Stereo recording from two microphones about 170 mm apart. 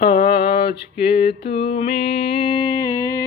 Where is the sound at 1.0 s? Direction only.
35° left (ahead or behind); by 3.2 s 20° left (ahead or behind).